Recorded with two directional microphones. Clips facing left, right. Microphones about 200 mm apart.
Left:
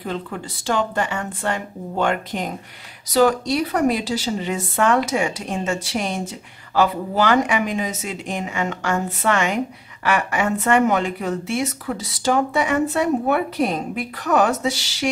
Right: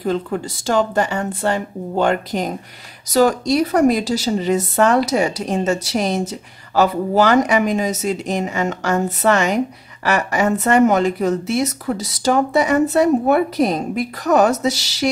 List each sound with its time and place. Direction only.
0.0 s a woman's voice: 40° right (ahead or behind)